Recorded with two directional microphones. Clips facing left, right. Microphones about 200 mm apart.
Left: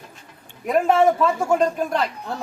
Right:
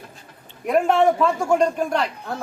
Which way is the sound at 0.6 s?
Centre (ahead or behind).